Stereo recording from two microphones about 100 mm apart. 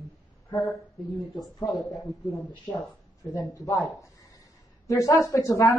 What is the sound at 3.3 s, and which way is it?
Speech, 35° left (ahead or behind).